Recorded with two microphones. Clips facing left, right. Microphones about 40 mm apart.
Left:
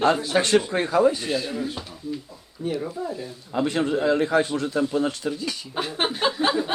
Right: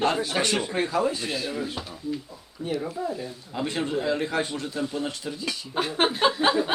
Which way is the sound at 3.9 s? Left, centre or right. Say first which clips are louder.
Left 5 dB; centre.